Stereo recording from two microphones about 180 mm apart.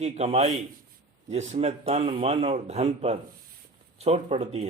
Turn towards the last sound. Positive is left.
turn(degrees=-35)  # may be behind; listen again after turning